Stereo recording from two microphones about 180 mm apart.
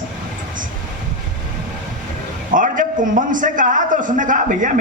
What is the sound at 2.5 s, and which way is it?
A man's voice, 45° right (ahead or behind).